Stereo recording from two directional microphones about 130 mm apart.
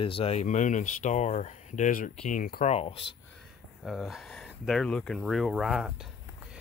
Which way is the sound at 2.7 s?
50° left (ahead or behind).